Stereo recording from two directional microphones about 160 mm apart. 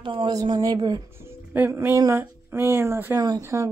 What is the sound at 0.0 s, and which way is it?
A woman's voice, 30° right (ahead or behind).